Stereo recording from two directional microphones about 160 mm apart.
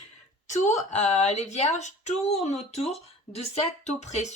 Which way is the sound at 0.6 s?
50° left (ahead or behind).